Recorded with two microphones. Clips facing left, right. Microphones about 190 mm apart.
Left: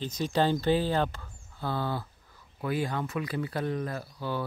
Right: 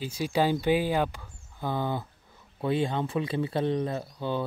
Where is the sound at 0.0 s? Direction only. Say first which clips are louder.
Right 1 dB; 10° right (ahead or behind).